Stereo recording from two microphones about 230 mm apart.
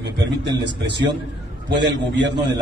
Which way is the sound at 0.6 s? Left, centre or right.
Right.